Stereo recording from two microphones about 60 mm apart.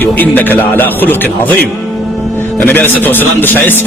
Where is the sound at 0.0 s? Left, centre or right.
Left.